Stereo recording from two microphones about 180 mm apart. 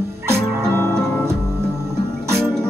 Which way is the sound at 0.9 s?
65° right (ahead or behind).